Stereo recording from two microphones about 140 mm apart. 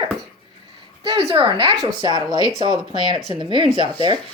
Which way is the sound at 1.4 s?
40° right (ahead or behind).